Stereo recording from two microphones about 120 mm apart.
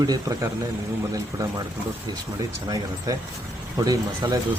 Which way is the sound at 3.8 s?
30° right (ahead or behind).